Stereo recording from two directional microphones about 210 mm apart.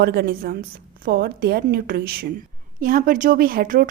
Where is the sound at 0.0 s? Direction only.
50° right (ahead or behind).